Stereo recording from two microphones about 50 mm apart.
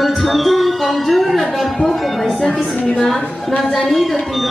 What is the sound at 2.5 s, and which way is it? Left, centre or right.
Speech, left.